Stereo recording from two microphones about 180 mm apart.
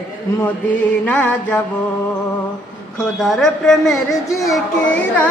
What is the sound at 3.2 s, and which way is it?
Speech, centre (ahead or behind).